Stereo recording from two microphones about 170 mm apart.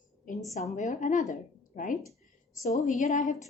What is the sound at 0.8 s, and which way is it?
Speech, 45° left (ahead or behind).